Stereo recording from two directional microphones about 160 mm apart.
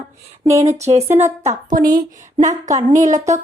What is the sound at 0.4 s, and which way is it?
Speech, 20° right (ahead or behind).